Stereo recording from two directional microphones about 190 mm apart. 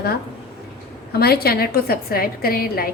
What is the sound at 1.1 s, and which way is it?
A woman's voice, 55° left (ahead or behind).